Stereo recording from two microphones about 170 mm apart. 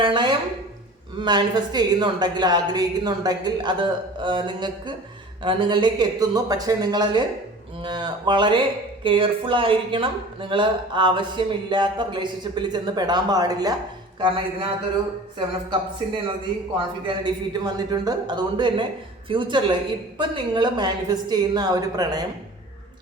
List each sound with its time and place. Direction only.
0.0 s speech: 30° right (ahead or behind)
15.7 s speech: 30° right (ahead or behind)